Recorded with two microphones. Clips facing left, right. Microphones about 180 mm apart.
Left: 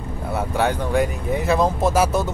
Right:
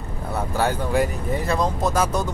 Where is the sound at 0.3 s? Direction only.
Centre (ahead or behind).